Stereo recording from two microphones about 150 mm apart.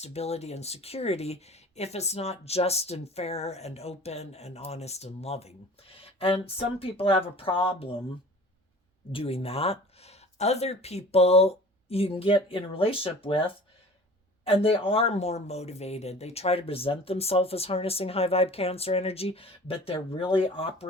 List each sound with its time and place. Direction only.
0.0 s speech: 45° left (ahead or behind)
9.1 s speech: 40° left (ahead or behind)